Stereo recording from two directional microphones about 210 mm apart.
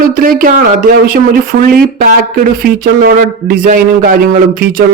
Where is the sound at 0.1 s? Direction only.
45° right (ahead or behind).